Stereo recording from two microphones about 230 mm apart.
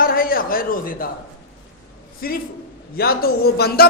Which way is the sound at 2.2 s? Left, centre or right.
Left.